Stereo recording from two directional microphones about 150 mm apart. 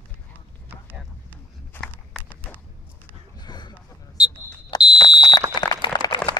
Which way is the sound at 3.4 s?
30° left (ahead or behind).